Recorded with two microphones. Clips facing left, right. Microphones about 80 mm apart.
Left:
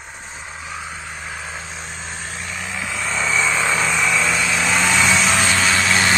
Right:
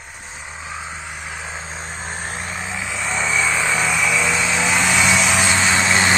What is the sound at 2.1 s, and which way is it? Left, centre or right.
Vehicle, right.